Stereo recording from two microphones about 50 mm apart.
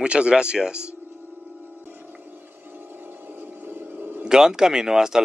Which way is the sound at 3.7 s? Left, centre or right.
Right.